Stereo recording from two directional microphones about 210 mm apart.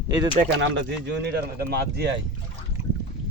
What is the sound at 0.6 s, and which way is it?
Speech, 55° right (ahead or behind).